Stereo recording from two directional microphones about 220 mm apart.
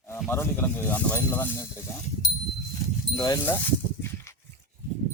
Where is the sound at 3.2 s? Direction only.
15° left (ahead or behind).